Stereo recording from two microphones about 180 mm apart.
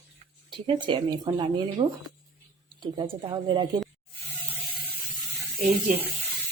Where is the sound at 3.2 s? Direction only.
25° right (ahead or behind).